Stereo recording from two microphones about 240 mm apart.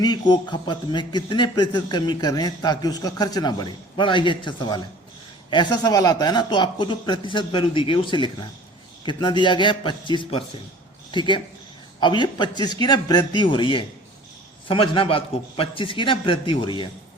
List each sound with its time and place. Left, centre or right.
0.0 s a man's voice: centre